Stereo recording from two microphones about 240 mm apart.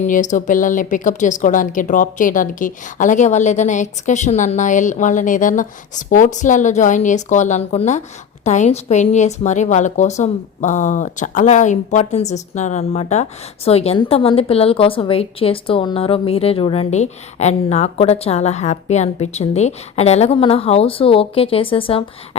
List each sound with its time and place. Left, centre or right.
0.0 s a woman's voice: left